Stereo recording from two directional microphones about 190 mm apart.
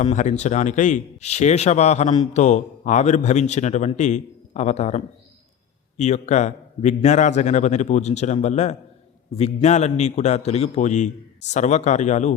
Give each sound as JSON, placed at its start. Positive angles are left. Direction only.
{"t": 0.0, "sound": "a man's voice", "side_deg": 40}